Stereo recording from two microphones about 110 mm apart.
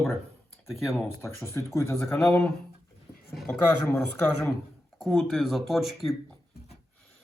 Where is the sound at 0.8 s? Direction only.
Centre (ahead or behind).